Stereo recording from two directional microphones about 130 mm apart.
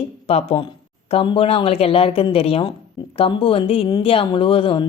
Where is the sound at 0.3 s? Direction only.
50° left (ahead or behind).